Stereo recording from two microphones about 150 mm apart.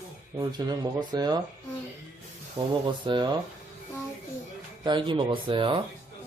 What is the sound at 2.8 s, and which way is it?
Speech, 30° right (ahead or behind).